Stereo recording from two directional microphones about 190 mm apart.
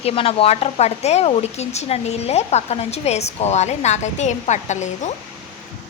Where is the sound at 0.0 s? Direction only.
30° left (ahead or behind).